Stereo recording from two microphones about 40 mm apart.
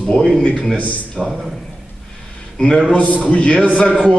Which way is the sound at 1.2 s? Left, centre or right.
Centre.